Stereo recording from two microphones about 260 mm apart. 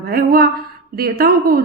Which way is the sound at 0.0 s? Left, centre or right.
Right.